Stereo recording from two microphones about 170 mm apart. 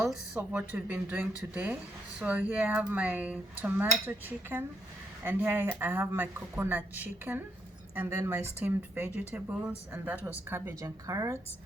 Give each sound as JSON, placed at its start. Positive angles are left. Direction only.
{"t": 0.0, "sound": "a woman's voice", "side_deg": -5}